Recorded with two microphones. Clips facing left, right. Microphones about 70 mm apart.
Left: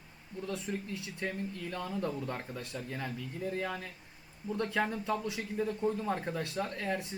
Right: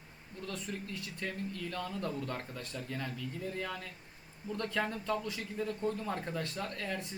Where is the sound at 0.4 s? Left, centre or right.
Centre.